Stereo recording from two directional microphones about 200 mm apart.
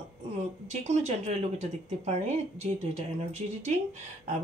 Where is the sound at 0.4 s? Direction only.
35° right (ahead or behind).